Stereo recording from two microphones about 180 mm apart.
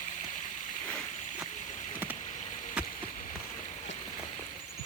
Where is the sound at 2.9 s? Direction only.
45° left (ahead or behind).